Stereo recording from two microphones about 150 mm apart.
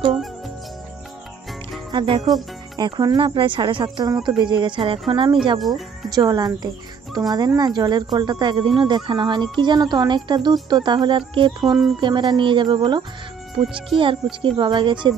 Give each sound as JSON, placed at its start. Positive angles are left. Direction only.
{"t": 1.9, "sound": "speech", "side_deg": -30}
{"t": 14.4, "sound": "speech", "side_deg": -30}